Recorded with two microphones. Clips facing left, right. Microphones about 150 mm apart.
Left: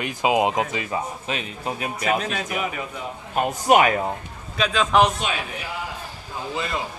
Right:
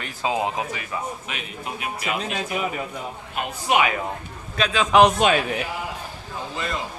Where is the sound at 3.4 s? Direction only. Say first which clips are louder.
Left 5 dB; 45° left (ahead or behind).